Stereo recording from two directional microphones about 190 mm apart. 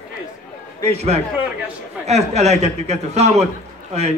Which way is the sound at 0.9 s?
35° right (ahead or behind).